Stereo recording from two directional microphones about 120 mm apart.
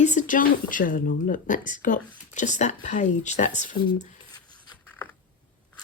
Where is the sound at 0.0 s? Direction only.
90° left.